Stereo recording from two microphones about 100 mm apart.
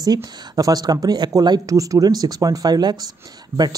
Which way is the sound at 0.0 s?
40° right (ahead or behind).